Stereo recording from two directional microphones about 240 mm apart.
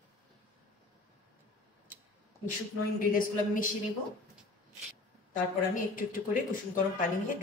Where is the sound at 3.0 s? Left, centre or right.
Left.